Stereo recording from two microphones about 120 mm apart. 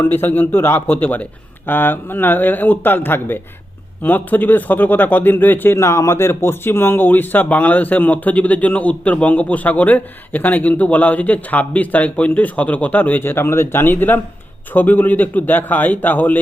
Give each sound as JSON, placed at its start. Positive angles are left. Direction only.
{"t": 0.0, "sound": "speech", "side_deg": 15}